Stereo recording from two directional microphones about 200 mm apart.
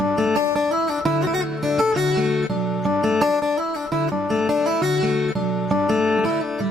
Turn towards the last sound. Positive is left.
turn(degrees=0)  # may be behind; listen again after turning